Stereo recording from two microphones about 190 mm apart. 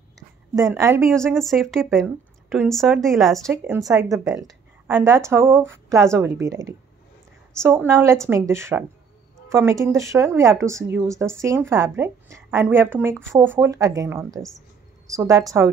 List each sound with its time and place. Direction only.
0.6 s speech: 15° right (ahead or behind)
1.0 s a woman's voice: centre (ahead or behind)
3.4 s speech: 15° right (ahead or behind)